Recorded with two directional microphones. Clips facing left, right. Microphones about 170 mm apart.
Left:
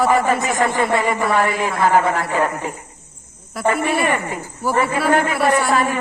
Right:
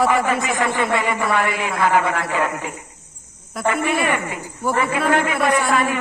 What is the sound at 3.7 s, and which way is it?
A man's voice, 40° left (ahead or behind).